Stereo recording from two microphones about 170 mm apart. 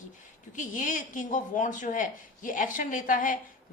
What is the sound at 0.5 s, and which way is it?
A woman's voice, 50° left (ahead or behind).